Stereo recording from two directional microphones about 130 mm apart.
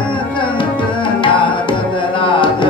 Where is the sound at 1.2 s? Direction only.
40° left (ahead or behind).